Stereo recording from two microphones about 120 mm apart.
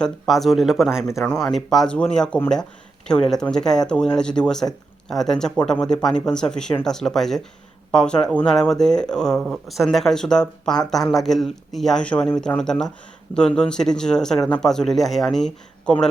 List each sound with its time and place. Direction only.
0.0 s speech: centre (ahead or behind)